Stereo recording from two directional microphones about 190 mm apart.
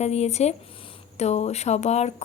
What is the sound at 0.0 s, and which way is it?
A woman's voice, 35° left (ahead or behind).